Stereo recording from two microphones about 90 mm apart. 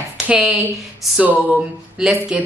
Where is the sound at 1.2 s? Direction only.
15° right (ahead or behind).